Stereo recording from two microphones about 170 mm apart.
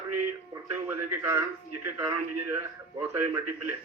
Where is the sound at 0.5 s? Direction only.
15° right (ahead or behind).